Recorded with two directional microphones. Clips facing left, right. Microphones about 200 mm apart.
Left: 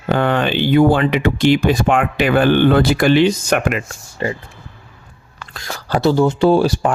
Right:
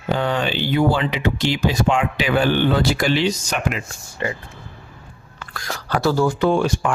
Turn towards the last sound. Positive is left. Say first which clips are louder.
# left 5 dB
turn(degrees=35)  # may be behind; listen again after turning